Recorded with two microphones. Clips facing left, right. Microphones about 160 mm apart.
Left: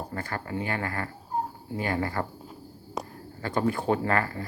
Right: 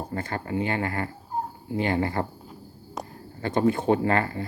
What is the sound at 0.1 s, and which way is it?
Speech, 25° right (ahead or behind).